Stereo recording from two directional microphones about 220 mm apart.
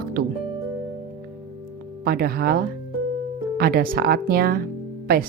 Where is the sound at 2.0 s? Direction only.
45° right (ahead or behind).